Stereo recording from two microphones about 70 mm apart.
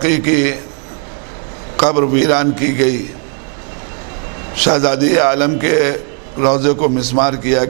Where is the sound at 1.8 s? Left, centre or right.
Centre.